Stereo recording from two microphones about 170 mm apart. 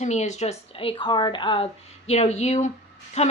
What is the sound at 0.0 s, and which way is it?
A woman's voice, 40° left (ahead or behind).